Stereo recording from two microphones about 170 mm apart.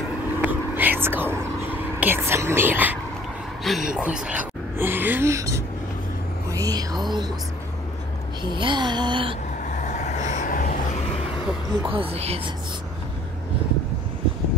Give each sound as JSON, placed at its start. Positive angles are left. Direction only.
{"t": 0.4, "sound": "whispering", "side_deg": -10}
{"t": 3.6, "sound": "speech", "side_deg": 0}
{"t": 6.5, "sound": "a sound", "side_deg": -20}
{"t": 8.4, "sound": "a sound", "side_deg": -25}
{"t": 9.7, "sound": "vehicle", "side_deg": 45}
{"t": 11.8, "sound": "speech", "side_deg": -35}